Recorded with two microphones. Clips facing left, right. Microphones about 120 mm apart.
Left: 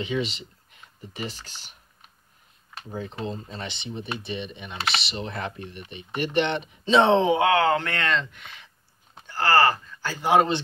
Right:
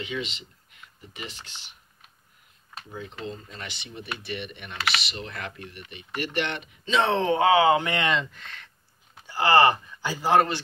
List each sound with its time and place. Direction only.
0.0 s speech: 35° left (ahead or behind)
7.3 s speech: 5° right (ahead or behind)
8.3 s speech: centre (ahead or behind)
9.2 s speech: 15° right (ahead or behind)